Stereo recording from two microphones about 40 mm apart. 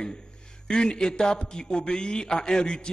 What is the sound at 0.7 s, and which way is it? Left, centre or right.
A man's voice, centre.